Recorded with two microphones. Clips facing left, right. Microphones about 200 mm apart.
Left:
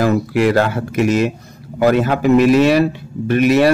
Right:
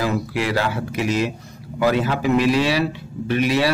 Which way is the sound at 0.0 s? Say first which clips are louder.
Left 8 dB; 50° left (ahead or behind).